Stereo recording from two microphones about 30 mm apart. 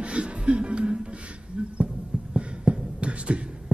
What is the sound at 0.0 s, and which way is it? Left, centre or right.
Music, right.